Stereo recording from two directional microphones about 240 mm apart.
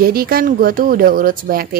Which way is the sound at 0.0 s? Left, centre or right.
Right.